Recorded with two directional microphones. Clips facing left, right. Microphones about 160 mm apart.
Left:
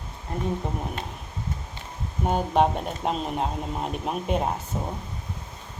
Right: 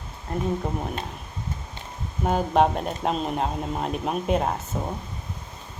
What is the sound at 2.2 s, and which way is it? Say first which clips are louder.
Speech: right 1 dB; centre (ahead or behind).